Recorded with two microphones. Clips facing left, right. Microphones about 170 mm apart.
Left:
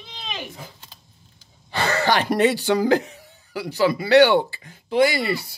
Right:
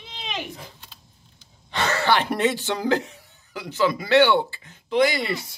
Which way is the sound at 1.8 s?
40° left (ahead or behind).